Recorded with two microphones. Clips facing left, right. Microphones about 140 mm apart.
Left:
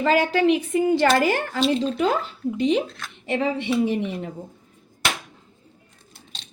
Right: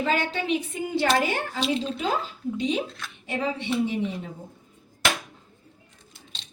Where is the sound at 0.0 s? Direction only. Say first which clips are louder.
Left 7 dB; 85° left.